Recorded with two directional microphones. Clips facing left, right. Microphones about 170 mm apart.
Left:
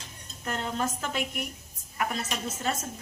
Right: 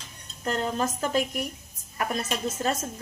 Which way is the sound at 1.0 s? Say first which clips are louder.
Right 6 dB; 35° right (ahead or behind).